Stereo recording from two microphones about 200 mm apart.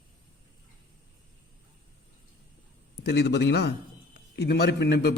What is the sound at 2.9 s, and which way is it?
A man's voice, 55° left (ahead or behind).